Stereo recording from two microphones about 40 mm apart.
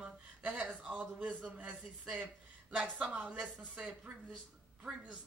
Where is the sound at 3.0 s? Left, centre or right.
Right.